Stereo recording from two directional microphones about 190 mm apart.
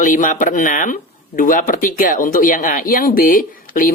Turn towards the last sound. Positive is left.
turn(degrees=50)  # may be behind; listen again after turning